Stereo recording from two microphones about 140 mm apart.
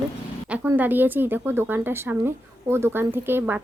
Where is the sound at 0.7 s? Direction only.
15° right (ahead or behind).